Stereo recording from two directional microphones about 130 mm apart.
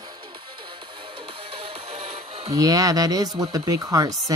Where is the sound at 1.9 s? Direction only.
55° right (ahead or behind).